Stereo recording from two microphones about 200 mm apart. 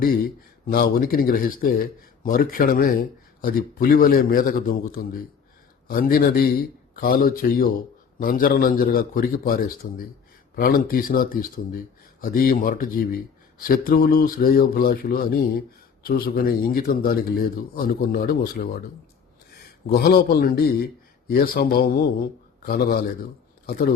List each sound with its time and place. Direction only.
0.0 s a sound: 45° left (ahead or behind)
0.7 s a man's voice: 50° left (ahead or behind)
19.9 s a man's voice: 50° left (ahead or behind)